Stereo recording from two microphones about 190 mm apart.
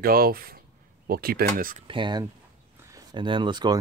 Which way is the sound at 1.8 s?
25° right (ahead or behind).